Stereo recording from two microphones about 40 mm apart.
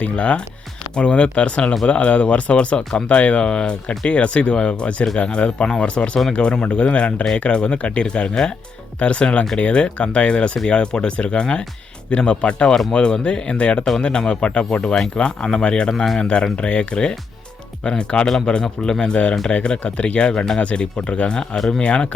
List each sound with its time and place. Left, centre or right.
0.0 s speech: left
14.9 s speech: centre